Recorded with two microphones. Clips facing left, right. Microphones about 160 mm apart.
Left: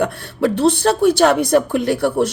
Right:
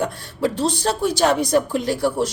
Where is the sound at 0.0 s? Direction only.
60° left (ahead or behind).